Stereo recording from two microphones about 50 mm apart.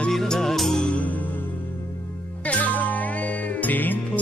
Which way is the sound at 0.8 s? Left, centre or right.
Left.